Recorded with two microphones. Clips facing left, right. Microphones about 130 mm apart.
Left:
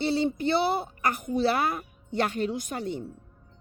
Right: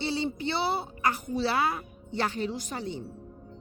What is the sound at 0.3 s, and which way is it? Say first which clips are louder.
A woman's voice: left 4 dB; 50° left (ahead or behind).